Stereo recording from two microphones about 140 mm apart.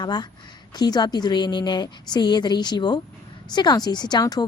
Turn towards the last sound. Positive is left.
turn(degrees=30)  # may be behind; listen again after turning